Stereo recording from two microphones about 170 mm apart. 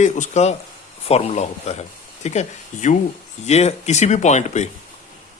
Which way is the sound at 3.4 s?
40° left (ahead or behind).